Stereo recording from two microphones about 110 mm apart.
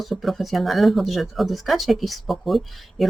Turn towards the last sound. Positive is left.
turn(degrees=0)  # may be behind; listen again after turning